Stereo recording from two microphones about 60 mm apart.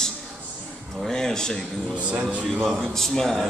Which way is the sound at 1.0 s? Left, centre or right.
Centre.